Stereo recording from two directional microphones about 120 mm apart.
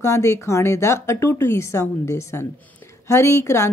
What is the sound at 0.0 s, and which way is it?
Speech, 25° left (ahead or behind).